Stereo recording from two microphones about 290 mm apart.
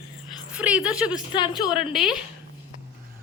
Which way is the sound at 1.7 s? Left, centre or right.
Centre.